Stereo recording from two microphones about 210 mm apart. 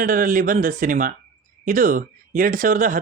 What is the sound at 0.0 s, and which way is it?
Speech, 40° right (ahead or behind).